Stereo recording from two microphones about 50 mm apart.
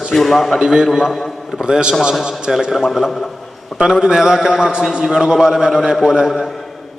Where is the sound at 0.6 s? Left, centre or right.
Centre.